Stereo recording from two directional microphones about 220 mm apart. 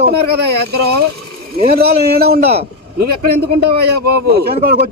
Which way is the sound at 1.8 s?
45° right (ahead or behind).